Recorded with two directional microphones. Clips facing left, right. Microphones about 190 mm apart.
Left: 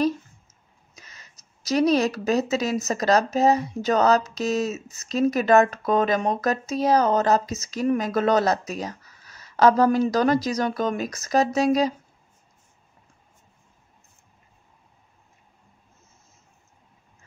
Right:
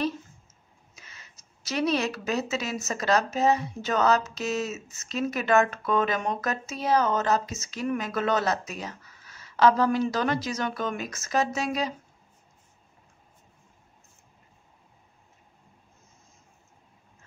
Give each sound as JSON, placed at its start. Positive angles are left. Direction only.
{"t": 0.9, "sound": "speech", "side_deg": 40}